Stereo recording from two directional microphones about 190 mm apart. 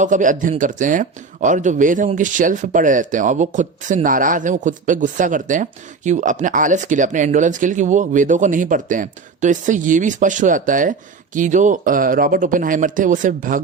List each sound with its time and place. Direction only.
0.0 s speech: 40° right (ahead or behind)